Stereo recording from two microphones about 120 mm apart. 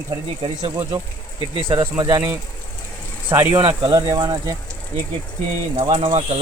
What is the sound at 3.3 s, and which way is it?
Speech, 20° right (ahead or behind).